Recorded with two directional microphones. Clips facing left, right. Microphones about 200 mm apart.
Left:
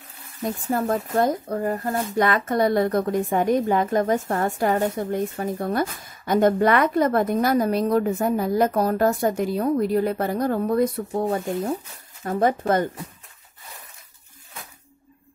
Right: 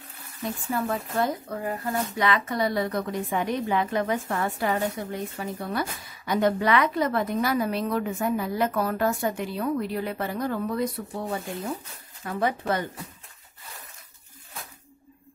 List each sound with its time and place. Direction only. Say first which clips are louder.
0.4 s speech: left 4 dB; 40° left (ahead or behind)